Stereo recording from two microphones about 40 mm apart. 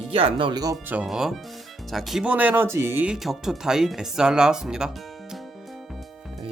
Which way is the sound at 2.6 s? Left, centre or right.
Right.